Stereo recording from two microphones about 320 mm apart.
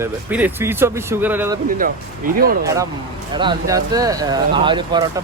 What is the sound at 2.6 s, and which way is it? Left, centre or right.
Speech, centre.